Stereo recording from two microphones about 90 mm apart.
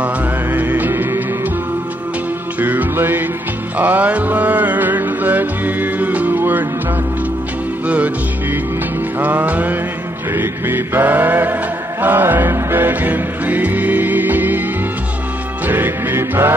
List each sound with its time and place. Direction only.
0.0 s music: 20° right (ahead or behind)
2.6 s music: 20° right (ahead or behind)
7.8 s music: 15° right (ahead or behind)
15.6 s music: 20° right (ahead or behind)